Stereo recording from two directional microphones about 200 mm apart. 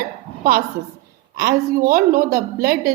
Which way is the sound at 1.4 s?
50° right (ahead or behind).